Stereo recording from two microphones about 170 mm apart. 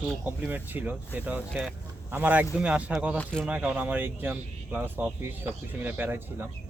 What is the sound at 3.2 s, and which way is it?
Speech, 5° left (ahead or behind).